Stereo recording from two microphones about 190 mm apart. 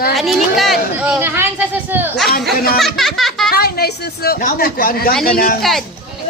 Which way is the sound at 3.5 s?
55° left (ahead or behind).